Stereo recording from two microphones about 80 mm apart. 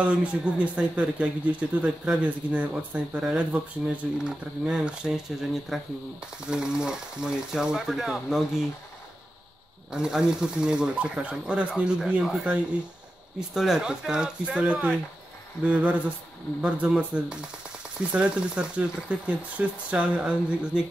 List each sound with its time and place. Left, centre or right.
0.0 s speech: centre
5.7 s speech: centre
9.9 s speech: centre
13.6 s speech: centre